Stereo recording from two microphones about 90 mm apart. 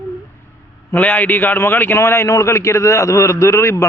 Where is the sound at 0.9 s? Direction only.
20° left (ahead or behind).